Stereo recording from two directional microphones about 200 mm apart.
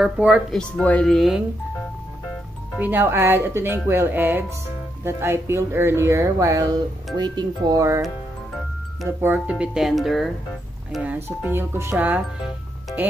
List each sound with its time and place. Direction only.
0.0 s speech: 5° right (ahead or behind)
0.6 s speech: 5° left (ahead or behind)
2.8 s speech: 10° right (ahead or behind)
9.2 s speech: 10° right (ahead or behind)